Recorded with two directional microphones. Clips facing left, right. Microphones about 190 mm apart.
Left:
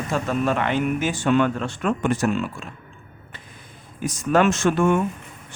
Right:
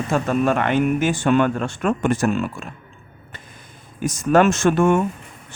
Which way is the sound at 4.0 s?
45° right (ahead or behind).